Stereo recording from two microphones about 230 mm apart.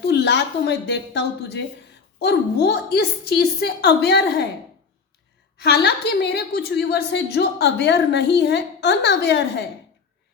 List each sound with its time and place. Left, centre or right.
0.0 s a woman's voice: left
5.5 s a woman's voice: left